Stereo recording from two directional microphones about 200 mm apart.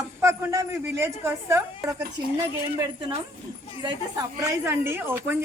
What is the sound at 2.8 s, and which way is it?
Speech, 25° right (ahead or behind).